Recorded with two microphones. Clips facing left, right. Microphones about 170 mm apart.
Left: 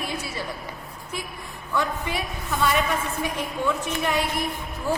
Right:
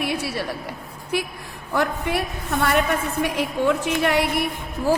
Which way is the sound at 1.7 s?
65° right (ahead or behind).